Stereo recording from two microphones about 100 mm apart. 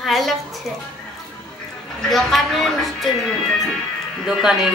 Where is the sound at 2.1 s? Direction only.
Centre (ahead or behind).